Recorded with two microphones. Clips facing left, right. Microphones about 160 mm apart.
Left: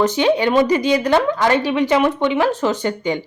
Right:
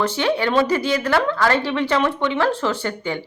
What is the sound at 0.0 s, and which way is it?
A woman's voice, 15° left (ahead or behind).